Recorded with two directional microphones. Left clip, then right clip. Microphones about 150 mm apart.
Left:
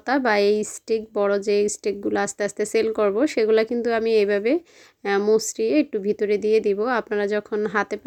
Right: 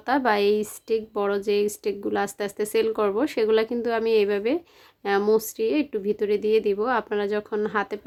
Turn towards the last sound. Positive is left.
turn(degrees=25)  # may be behind; listen again after turning